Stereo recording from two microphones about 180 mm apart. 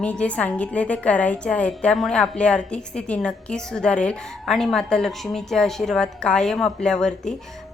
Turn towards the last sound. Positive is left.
turn(degrees=5)  # may be behind; listen again after turning